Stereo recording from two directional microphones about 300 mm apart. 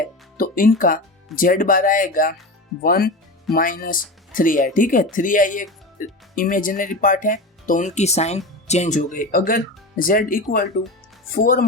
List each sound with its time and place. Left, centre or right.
0.0 s music: left
1.4 s speech: left